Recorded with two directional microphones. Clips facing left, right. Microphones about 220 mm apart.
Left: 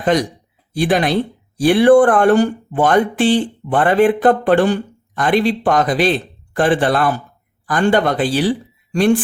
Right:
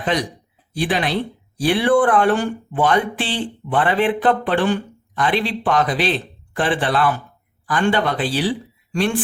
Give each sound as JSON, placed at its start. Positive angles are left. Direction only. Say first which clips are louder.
{"t": 0.0, "sound": "speech", "louder": "left 6 dB", "side_deg": 45}